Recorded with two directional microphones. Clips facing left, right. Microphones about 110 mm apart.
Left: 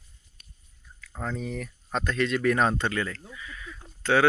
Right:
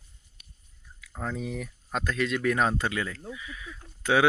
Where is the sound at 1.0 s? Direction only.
5° right (ahead or behind).